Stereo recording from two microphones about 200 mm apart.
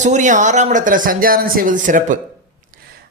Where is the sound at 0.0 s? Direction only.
40° right (ahead or behind).